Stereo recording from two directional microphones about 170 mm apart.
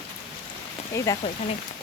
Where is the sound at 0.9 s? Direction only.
15° left (ahead or behind).